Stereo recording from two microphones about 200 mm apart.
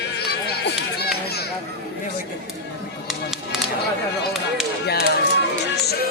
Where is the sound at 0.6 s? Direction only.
50° left (ahead or behind).